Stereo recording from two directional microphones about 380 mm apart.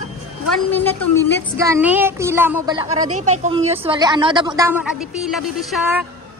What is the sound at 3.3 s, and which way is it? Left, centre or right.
A woman's voice, centre.